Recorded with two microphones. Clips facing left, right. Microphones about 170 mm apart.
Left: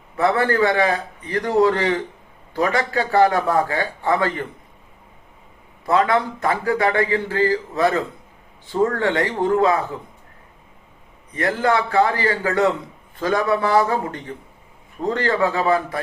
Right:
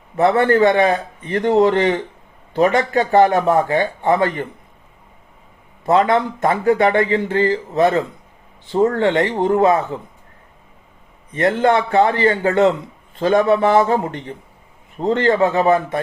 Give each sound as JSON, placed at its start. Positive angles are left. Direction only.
{"t": 0.2, "sound": "a man's voice", "side_deg": -25}
{"t": 5.9, "sound": "a man's voice", "side_deg": -25}
{"t": 11.3, "sound": "a man's voice", "side_deg": -25}